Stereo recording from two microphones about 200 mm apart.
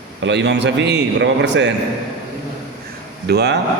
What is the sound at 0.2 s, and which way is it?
A man's voice, 60° right (ahead or behind).